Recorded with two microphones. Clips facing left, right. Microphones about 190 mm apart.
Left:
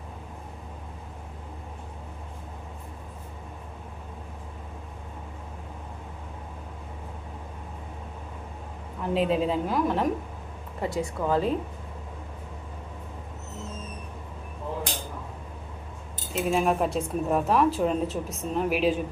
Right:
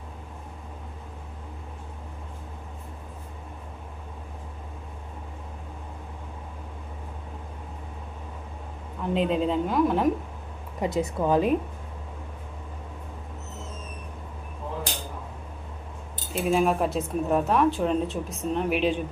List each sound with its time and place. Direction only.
9.0 s speech: 5° left (ahead or behind)
10.8 s a woman's voice: 20° right (ahead or behind)
16.3 s speech: centre (ahead or behind)